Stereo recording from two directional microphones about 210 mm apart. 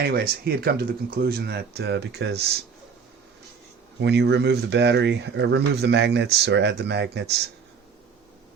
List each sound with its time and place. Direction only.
0.0 s speech: 45° right (ahead or behind)
4.0 s speech: 55° right (ahead or behind)